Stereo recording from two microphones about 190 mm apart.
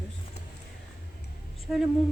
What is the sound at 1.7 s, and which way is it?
Speech, 5° right (ahead or behind).